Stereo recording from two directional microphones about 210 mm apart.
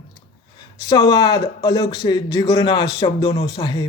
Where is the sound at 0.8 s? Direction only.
20° left (ahead or behind).